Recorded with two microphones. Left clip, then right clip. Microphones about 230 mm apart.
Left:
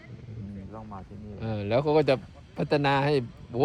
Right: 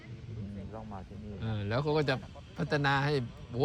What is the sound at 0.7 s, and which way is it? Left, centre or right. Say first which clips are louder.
Vehicle: left 3 dB; left.